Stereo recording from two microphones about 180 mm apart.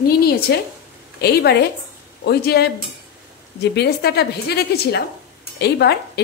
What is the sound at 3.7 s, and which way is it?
A woman's voice, 65° left (ahead or behind).